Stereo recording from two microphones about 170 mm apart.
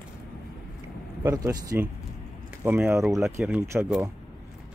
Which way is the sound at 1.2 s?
20° right (ahead or behind).